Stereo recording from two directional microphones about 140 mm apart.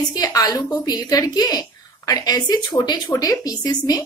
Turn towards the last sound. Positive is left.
turn(degrees=30)  # may be behind; listen again after turning